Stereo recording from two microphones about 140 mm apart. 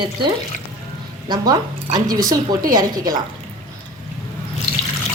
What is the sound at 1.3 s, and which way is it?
A woman's voice, 30° right (ahead or behind).